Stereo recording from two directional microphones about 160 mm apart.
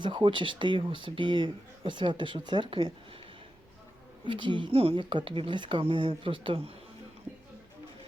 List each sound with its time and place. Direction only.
0.0 s speech: 30° right (ahead or behind)
4.3 s speech: 30° right (ahead or behind)
7.3 s music: 10° right (ahead or behind)